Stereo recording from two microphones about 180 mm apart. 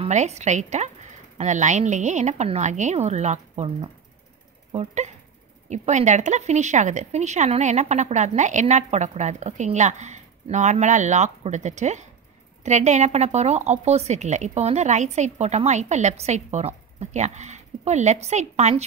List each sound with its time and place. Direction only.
0.0 s speech: 40° right (ahead or behind)